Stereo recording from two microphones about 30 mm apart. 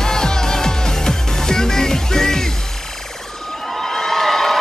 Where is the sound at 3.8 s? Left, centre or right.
Centre.